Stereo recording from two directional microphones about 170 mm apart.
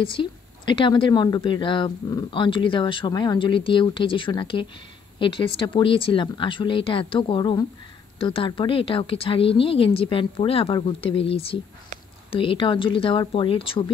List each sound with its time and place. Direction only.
0.0 s speech: 30° left (ahead or behind)